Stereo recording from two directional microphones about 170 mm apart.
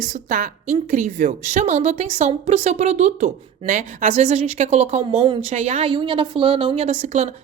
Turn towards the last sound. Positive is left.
turn(degrees=-40)  # may be behind; listen again after turning